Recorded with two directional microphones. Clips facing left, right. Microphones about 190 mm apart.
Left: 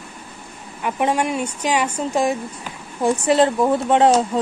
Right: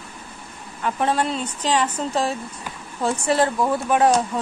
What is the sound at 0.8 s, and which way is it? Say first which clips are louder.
A woman's voice: left 2 dB; 15° left (ahead or behind).